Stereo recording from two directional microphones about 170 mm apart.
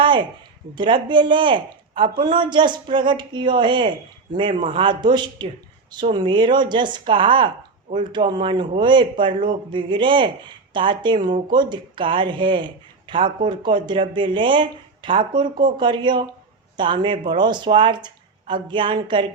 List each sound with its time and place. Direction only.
0.8 s speech: 30° right (ahead or behind)